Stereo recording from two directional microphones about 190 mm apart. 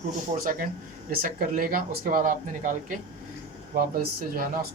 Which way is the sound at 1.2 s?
50° right (ahead or behind).